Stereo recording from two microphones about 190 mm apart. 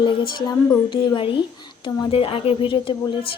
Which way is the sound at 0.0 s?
25° left (ahead or behind).